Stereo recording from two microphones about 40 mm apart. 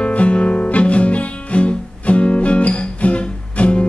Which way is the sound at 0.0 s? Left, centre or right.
Left.